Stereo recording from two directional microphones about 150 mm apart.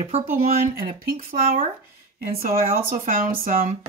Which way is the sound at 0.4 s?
55° right (ahead or behind).